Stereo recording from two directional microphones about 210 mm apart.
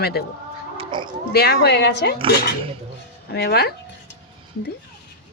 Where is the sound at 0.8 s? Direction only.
20° right (ahead or behind).